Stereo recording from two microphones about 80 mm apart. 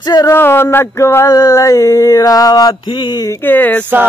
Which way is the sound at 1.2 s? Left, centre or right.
Left.